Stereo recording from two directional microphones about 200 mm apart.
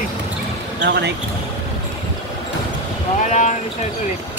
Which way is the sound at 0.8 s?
55° right (ahead or behind).